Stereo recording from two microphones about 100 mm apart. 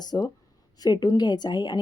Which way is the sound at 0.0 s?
40° left (ahead or behind).